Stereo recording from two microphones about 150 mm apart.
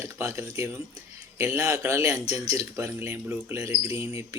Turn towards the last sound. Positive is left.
turn(degrees=-20)  # may be behind; listen again after turning